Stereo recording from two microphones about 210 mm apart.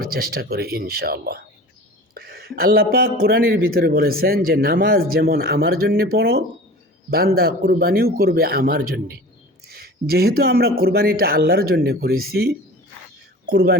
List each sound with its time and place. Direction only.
0.0 s speech: 45° right (ahead or behind)